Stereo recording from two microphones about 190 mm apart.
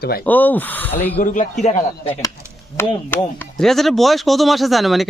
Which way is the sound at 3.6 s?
Centre (ahead or behind).